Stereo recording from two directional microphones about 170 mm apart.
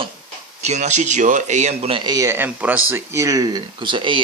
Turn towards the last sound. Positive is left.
turn(degrees=-30)  # may be behind; listen again after turning